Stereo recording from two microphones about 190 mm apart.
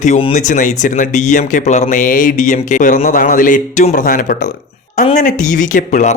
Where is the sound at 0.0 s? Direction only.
35° left (ahead or behind).